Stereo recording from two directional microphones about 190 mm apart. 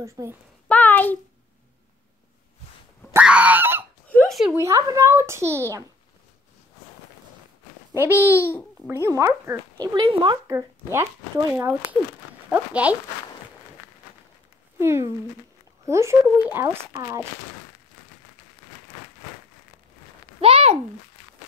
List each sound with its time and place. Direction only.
0.0 s speech: 15° right (ahead or behind)
0.7 s a sound: 10° left (ahead or behind)
3.1 s honk: 5° right (ahead or behind)
4.1 s a sound: 5° left (ahead or behind)
4.6 s speech: 15° right (ahead or behind)
7.9 s speech: 10° right (ahead or behind)
8.4 s a child's voice: 10° left (ahead or behind)
8.8 s speech: 15° right (ahead or behind)
10.9 s speech: 15° right (ahead or behind)
14.8 s speech: 15° right (ahead or behind)
20.3 s a child's voice: 30° right (ahead or behind)